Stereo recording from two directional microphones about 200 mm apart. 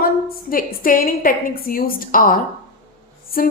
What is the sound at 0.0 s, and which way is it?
A woman's voice, 45° left (ahead or behind).